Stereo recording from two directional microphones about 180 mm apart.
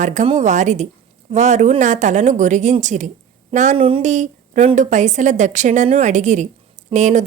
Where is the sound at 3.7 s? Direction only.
30° right (ahead or behind).